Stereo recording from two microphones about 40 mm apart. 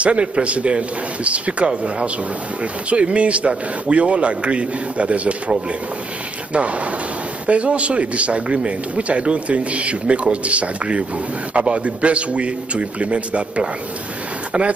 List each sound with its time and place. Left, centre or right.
0.0 s speech: right